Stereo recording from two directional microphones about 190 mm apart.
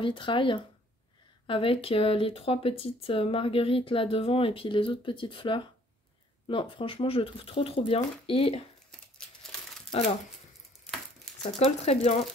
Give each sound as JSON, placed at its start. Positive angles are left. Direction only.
{"t": 0.0, "sound": "speech", "side_deg": 25}
{"t": 9.8, "sound": "speech", "side_deg": 35}
{"t": 11.4, "sound": "speech", "side_deg": 35}